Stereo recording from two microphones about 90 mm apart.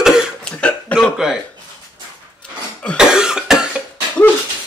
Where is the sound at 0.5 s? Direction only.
10° left (ahead or behind).